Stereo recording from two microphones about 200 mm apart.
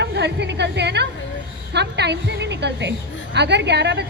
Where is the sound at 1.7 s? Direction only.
60° right (ahead or behind).